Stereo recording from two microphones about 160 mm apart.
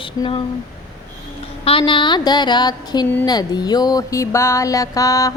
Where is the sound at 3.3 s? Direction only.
25° left (ahead or behind).